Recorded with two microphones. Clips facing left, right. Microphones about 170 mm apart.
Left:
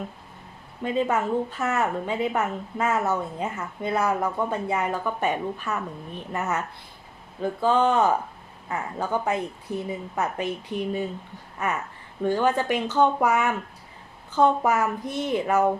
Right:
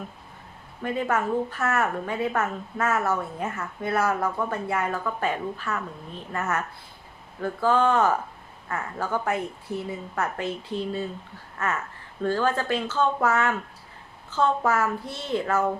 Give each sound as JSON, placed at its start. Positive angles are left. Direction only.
{"t": 0.8, "sound": "a woman's voice", "side_deg": 20}